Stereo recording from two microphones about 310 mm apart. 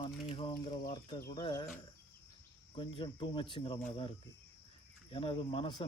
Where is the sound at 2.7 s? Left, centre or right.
Centre.